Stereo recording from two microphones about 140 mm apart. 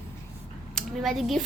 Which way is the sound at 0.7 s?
Centre (ahead or behind).